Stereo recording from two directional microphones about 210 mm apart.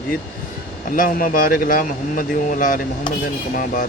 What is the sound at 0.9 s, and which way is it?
A man's voice, 40° left (ahead or behind).